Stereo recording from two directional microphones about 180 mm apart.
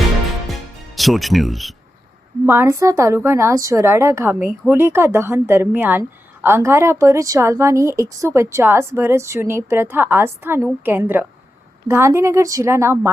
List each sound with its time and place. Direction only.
0.9 s speech: centre (ahead or behind)
2.5 s a woman's voice: 15° right (ahead or behind)